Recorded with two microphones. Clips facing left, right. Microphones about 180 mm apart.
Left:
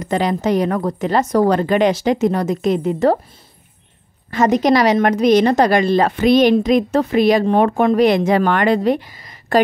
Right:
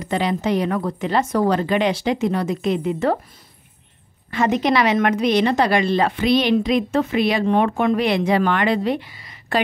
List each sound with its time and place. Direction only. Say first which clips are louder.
0.0 s a woman's voice: left 3 dB; 45° left (ahead or behind)
4.3 s a woman's voice: left 5 dB; 40° left (ahead or behind)